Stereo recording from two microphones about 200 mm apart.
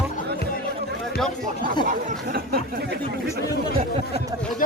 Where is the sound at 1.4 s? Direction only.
45° right (ahead or behind).